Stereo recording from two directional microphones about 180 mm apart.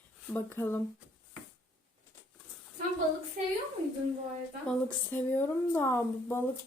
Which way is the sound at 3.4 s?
50° right (ahead or behind).